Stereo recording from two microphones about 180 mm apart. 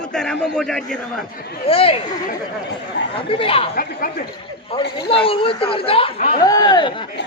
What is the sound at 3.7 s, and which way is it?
Speech, 50° left (ahead or behind).